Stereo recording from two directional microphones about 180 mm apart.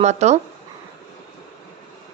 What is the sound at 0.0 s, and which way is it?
Speech, 40° right (ahead or behind).